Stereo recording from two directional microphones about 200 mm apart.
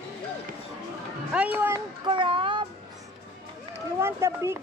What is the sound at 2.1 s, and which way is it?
Speech, 25° right (ahead or behind).